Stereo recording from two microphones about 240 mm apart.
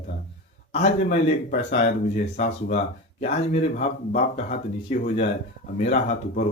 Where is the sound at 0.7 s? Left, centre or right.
Left.